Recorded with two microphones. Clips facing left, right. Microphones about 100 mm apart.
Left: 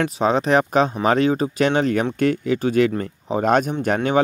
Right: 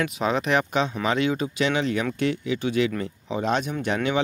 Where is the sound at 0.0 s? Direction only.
35° left (ahead or behind).